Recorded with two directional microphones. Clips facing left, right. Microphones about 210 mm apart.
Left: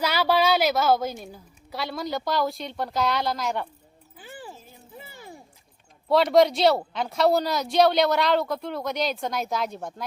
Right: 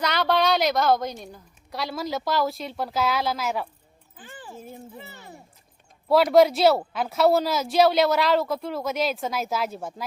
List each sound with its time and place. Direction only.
0.0 s speech: 5° left (ahead or behind)
4.2 s music: 10° left (ahead or behind)
4.9 s a sound: 10° left (ahead or behind)
6.1 s speech: centre (ahead or behind)